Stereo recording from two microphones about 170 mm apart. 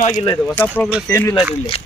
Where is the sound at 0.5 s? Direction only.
10° left (ahead or behind).